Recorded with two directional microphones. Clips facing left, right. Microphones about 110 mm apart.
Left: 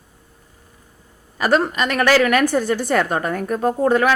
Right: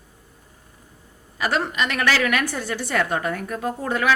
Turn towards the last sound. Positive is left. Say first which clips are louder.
# left 6 dB
turn(degrees=45)  # may be behind; listen again after turning